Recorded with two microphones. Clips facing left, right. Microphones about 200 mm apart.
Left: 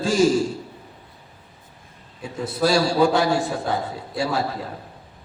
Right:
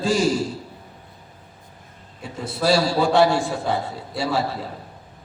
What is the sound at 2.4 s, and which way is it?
A man's voice, 40° left (ahead or behind).